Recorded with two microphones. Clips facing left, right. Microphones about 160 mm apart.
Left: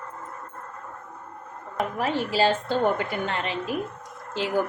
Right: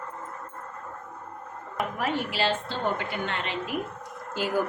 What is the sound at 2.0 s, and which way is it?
A woman's voice, 35° left (ahead or behind).